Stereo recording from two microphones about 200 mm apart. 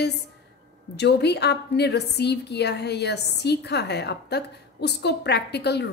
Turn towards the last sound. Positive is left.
turn(degrees=55)  # may be behind; listen again after turning